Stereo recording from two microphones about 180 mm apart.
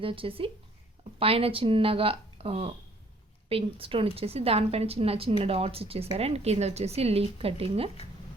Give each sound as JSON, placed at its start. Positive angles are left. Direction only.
{"t": 0.0, "sound": "a woman's voice", "side_deg": -30}